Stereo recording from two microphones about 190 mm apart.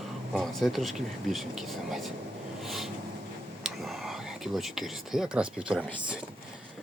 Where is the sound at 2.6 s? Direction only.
Centre (ahead or behind).